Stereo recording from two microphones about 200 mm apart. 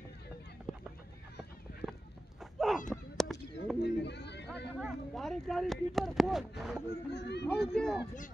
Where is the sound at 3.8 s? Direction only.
60° left (ahead or behind).